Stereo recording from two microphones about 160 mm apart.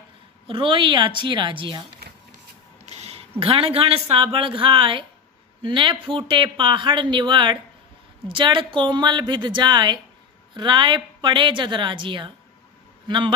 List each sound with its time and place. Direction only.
0.5 s speech: 30° right (ahead or behind)
2.8 s a woman's voice: 40° right (ahead or behind)